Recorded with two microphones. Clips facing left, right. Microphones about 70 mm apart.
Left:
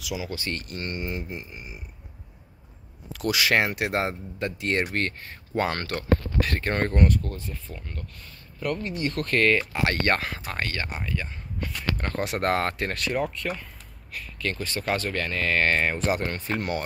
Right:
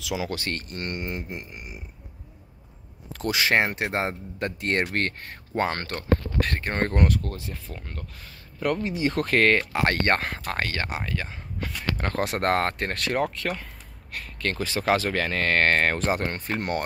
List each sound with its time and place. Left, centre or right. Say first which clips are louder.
0.0 s speech: right 3 dB; right
0.5 s speech: right 1 dB; right
3.1 s speech: even; right
4.4 s speech: right 1 dB; right
5.6 s speech: even; right
6.5 s speech: left 2 dB; right
6.9 s speech: left 1 dB; right
9.8 s speech: right 1 dB; right
12.0 s speech: right 2 dB; right
13.0 s speech: right 2 dB; right
16.1 s speech: even; right